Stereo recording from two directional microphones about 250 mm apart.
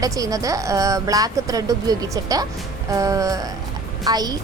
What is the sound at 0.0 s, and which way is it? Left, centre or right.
A woman's voice, centre.